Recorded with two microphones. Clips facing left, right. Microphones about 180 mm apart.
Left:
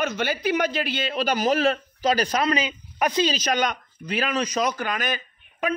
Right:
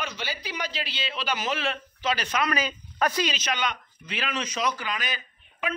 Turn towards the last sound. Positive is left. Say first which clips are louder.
# left 6 dB
turn(degrees=45)  # may be behind; listen again after turning